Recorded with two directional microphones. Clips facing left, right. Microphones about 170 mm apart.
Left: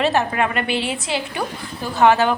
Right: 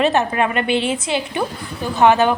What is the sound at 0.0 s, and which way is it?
A woman's voice, 20° right (ahead or behind).